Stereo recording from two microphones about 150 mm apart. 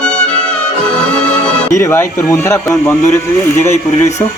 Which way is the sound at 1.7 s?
20° left (ahead or behind).